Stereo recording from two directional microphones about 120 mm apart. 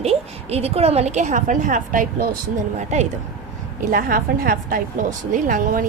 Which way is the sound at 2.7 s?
75° right (ahead or behind).